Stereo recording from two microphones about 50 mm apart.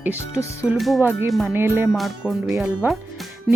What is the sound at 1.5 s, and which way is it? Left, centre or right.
Speech, right.